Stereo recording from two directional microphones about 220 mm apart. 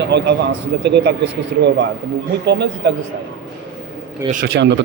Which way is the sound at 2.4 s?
50° right (ahead or behind).